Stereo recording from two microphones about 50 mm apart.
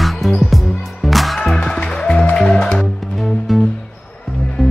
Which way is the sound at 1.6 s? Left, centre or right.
Centre.